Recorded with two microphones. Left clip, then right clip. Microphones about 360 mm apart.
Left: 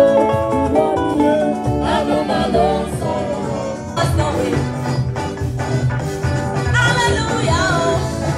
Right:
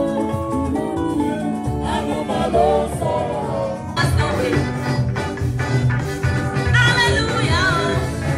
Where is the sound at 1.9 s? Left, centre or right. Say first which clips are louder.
Left 5 dB; centre.